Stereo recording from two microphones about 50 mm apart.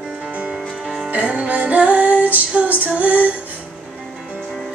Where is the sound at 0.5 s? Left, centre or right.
Centre.